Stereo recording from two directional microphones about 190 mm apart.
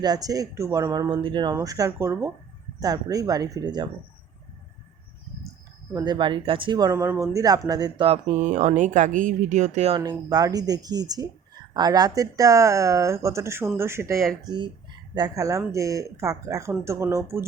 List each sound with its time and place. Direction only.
0.0 s speech: 20° right (ahead or behind)
5.9 s speech: 25° right (ahead or behind)
10.0 s speech: 20° right (ahead or behind)